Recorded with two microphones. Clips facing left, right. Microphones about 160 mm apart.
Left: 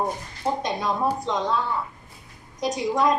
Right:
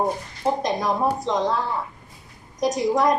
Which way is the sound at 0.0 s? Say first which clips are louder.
Right 3 dB; 15° right (ahead or behind).